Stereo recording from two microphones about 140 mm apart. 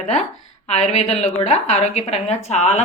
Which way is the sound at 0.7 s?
55° left (ahead or behind).